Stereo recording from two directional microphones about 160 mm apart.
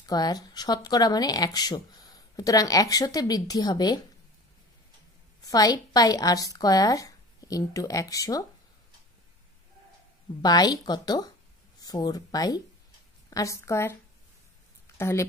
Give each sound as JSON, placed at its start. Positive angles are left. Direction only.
{"t": 0.0, "sound": "speech", "side_deg": 25}
{"t": 5.4, "sound": "speech", "side_deg": 25}
{"t": 10.4, "sound": "speech", "side_deg": 25}
{"t": 15.0, "sound": "speech", "side_deg": 15}